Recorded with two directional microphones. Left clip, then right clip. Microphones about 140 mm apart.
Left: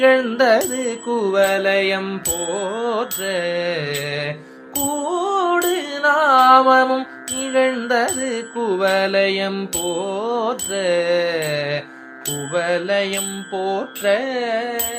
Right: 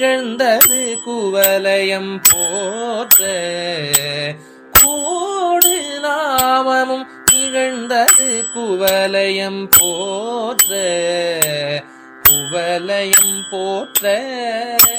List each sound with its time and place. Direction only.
0.0 s mantra: 45° right (ahead or behind)
2.8 s mantra: 50° right (ahead or behind)
5.0 s music: 50° right (ahead or behind)
7.5 s bicycle bell: 45° right (ahead or behind)
8.6 s mantra: 50° right (ahead or behind)
12.5 s music: 50° right (ahead or behind)
13.6 s mantra: 45° right (ahead or behind)